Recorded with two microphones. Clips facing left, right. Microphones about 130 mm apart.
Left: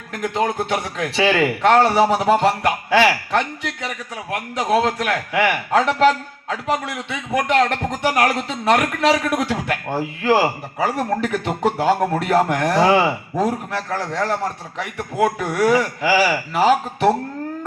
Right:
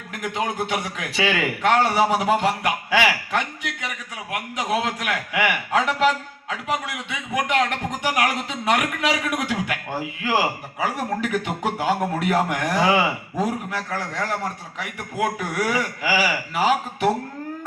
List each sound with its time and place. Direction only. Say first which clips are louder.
0.1 s a man's voice: left 5 dB; 35° left (ahead or behind)